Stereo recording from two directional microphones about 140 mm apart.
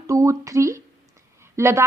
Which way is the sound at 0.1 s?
25° right (ahead or behind).